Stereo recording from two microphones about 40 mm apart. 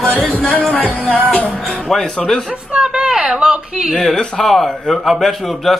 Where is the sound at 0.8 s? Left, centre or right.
Left.